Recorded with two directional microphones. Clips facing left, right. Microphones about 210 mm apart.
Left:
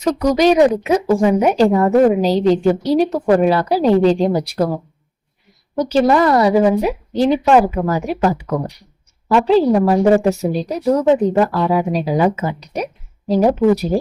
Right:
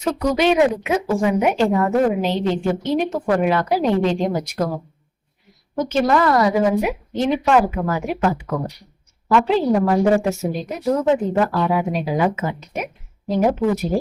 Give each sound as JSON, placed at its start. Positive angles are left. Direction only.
{"t": 0.0, "sound": "speech", "side_deg": 40}
{"t": 5.7, "sound": "speech", "side_deg": 35}
{"t": 9.3, "sound": "speech", "side_deg": 35}